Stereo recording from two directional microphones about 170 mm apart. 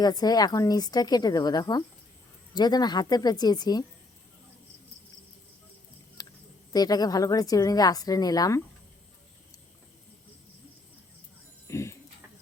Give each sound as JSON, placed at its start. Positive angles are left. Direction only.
{"t": 0.0, "sound": "a woman's voice", "side_deg": 25}
{"t": 6.7, "sound": "a woman's voice", "side_deg": 20}
{"t": 11.7, "sound": "a sound", "side_deg": 15}